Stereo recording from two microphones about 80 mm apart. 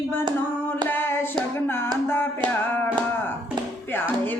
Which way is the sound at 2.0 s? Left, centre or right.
Left.